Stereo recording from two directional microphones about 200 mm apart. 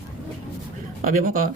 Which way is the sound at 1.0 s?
40° right (ahead or behind).